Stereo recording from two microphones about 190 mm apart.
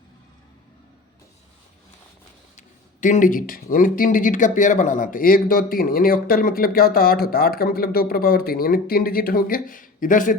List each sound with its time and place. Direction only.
2.6 s speech: 40° left (ahead or behind)